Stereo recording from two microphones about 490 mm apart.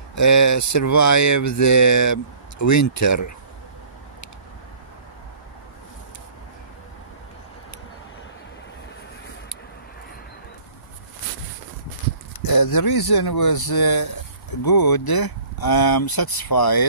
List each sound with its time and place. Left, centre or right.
0.1 s speech: left
12.4 s speech: left